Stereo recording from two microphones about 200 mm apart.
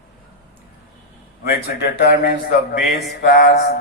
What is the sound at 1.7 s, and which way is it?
Speech, 55° left (ahead or behind).